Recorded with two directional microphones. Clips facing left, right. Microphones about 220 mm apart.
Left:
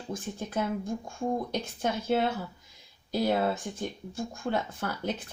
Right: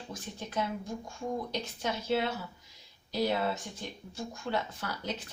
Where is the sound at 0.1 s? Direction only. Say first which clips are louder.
Left 6 dB; 50° left (ahead or behind).